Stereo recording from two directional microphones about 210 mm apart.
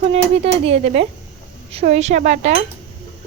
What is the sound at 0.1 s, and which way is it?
Speech, 30° right (ahead or behind).